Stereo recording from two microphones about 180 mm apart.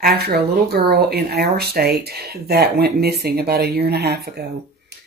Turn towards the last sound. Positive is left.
turn(degrees=-65)  # may be behind; listen again after turning